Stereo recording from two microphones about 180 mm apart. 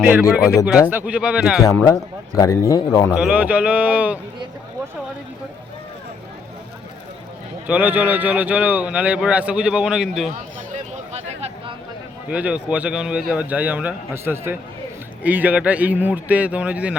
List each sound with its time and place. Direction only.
0.0 s a man's voice: 10° right (ahead or behind)
1.6 s a man's voice: 20° left (ahead or behind)
3.2 s a man's voice: 5° right (ahead or behind)
7.7 s a man's voice: 10° right (ahead or behind)
10.9 s a sound: 40° right (ahead or behind)
12.3 s a man's voice: 5° right (ahead or behind)